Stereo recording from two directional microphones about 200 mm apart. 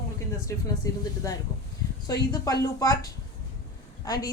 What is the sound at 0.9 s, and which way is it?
Speech, 15° left (ahead or behind).